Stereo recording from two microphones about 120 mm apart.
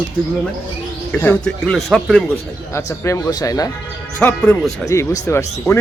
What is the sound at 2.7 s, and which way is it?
Speech, 25° left (ahead or behind).